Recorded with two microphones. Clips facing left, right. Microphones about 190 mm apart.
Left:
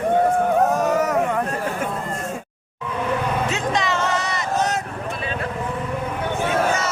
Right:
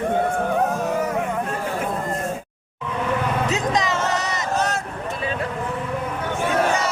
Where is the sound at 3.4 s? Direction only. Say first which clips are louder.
Right 1 dB; 35° right (ahead or behind).